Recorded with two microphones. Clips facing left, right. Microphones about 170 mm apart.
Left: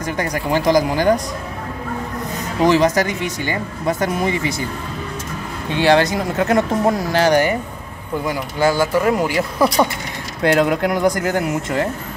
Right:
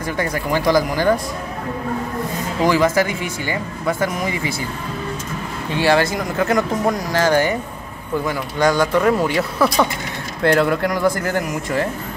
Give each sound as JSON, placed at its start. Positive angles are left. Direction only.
{"t": 0.0, "sound": "speech", "side_deg": 20}
{"t": 2.6, "sound": "speech", "side_deg": 20}
{"t": 5.8, "sound": "speech", "side_deg": 20}
{"t": 7.2, "sound": "speech", "side_deg": 15}
{"t": 8.5, "sound": "speech", "side_deg": 5}